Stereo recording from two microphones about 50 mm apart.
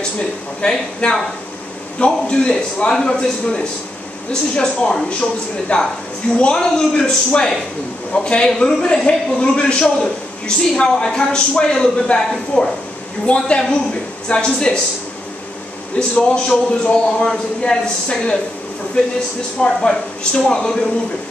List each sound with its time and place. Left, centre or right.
0.6 s a man's voice: centre
6.5 s a man's voice: centre
16.0 s a man's voice: centre
19.6 s a man's voice: left